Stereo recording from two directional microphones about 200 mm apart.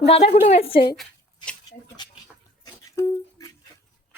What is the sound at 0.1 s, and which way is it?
Speech, 35° left (ahead or behind).